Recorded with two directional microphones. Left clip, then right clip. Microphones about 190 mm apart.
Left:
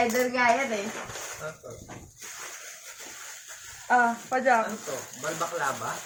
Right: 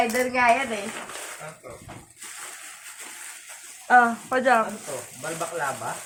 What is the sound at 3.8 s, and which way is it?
Speech, 25° right (ahead or behind).